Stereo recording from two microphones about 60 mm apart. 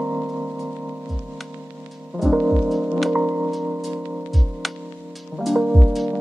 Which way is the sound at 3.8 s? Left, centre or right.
Centre.